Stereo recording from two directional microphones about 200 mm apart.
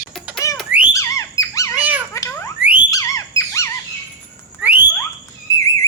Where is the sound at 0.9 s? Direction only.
15° left (ahead or behind).